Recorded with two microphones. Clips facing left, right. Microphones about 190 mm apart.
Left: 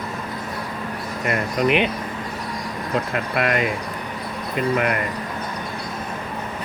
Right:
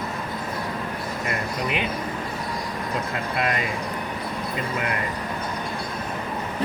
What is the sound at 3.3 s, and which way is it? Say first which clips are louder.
Speech: left 4 dB; 65° left (ahead or behind).